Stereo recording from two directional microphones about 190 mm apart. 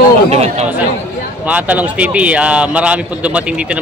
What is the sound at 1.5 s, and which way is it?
Speech, 10° right (ahead or behind).